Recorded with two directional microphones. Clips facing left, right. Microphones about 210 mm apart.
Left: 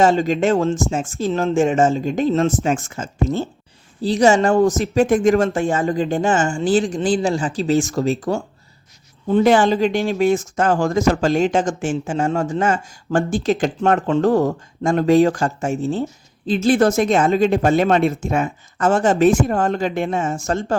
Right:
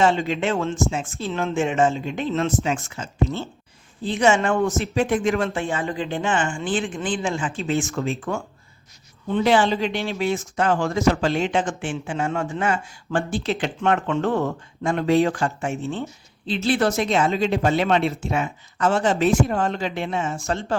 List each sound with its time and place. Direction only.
0.0 s speech: 40° left (ahead or behind)